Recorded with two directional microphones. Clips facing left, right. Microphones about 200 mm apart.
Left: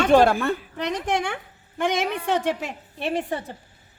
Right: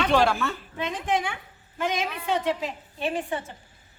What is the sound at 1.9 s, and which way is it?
Speech, 75° left (ahead or behind).